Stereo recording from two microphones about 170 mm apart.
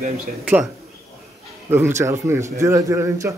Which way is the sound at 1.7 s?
15° right (ahead or behind).